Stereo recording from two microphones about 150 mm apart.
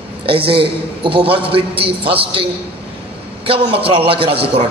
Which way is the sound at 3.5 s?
40° right (ahead or behind).